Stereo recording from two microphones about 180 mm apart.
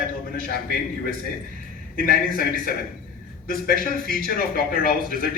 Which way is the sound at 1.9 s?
55° left (ahead or behind).